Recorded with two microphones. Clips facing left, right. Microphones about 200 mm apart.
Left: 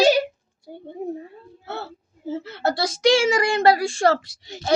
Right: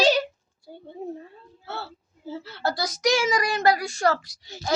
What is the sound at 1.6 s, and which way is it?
Whimper, 20° left (ahead or behind).